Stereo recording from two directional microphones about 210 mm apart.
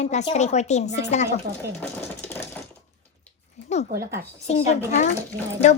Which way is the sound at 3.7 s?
30° left (ahead or behind).